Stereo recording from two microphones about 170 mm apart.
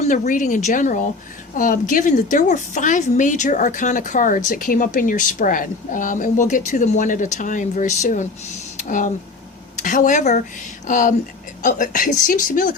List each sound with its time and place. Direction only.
0.0 s a woman's voice: 50° left (ahead or behind)